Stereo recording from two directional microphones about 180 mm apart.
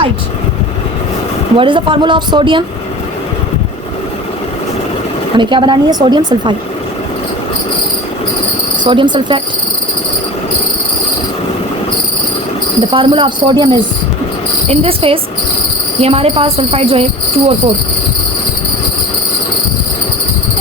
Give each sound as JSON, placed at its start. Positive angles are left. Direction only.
{"t": 1.5, "sound": "speech", "side_deg": -25}
{"t": 5.4, "sound": "speech", "side_deg": -25}
{"t": 8.8, "sound": "speech", "side_deg": -25}
{"t": 12.8, "sound": "speech", "side_deg": -25}